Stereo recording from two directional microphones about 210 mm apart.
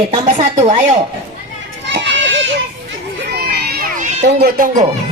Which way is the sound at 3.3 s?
50° right (ahead or behind).